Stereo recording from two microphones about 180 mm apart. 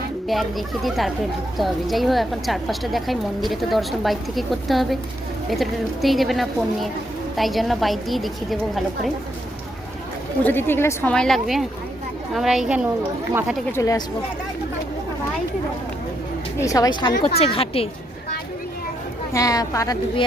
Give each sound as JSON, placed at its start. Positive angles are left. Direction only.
{"t": 0.3, "sound": "a woman's voice", "side_deg": 0}
{"t": 10.4, "sound": "a woman's voice", "side_deg": 10}
{"t": 13.7, "sound": "a woman's voice", "side_deg": 20}
{"t": 16.6, "sound": "a woman's voice", "side_deg": 20}
{"t": 19.3, "sound": "a woman's voice", "side_deg": 20}